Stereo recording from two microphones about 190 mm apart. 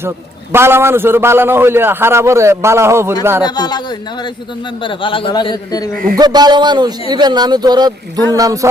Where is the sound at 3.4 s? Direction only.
20° left (ahead or behind).